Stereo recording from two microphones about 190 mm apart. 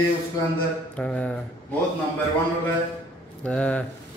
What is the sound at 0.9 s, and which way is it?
Speech, 5° left (ahead or behind).